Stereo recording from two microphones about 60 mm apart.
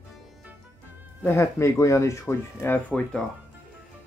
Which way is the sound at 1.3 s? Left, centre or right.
Left.